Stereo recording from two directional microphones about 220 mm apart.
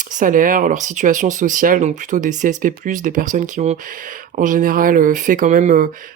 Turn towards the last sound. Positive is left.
turn(degrees=-35)  # may be behind; listen again after turning